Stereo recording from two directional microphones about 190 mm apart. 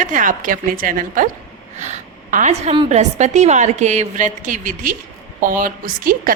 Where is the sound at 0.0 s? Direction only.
45° right (ahead or behind).